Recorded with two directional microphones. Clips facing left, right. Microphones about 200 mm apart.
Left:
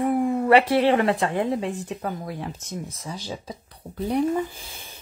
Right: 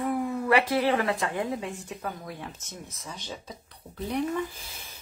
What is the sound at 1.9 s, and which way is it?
Speech, 35° left (ahead or behind).